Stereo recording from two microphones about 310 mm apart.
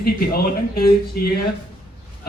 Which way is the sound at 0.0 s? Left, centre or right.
Left.